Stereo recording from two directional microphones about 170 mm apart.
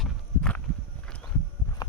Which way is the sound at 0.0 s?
5° left (ahead or behind).